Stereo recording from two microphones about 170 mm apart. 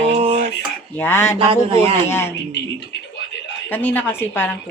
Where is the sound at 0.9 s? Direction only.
15° left (ahead or behind).